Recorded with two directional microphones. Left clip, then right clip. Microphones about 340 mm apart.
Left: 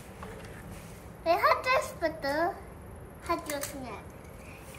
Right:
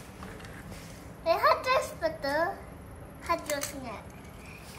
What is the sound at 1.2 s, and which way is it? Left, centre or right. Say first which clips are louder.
Babbling: even; centre.